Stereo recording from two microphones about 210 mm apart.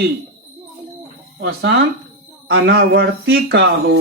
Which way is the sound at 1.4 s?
50° right (ahead or behind).